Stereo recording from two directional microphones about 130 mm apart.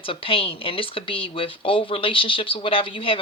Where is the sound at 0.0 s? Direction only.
45° left (ahead or behind).